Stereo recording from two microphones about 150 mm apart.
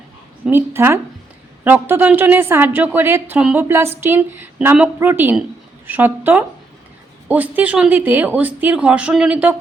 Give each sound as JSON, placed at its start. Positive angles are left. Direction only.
{"t": 0.4, "sound": "a woman's voice", "side_deg": -15}